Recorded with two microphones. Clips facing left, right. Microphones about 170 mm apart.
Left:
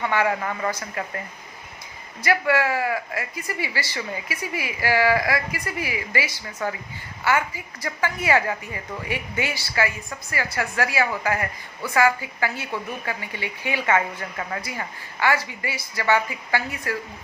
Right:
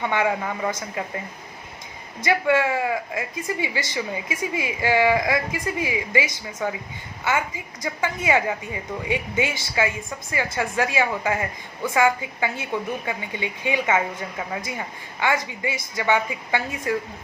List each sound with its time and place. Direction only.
0.0 s speech: 20° right (ahead or behind)
2.2 s a woman's voice: 25° right (ahead or behind)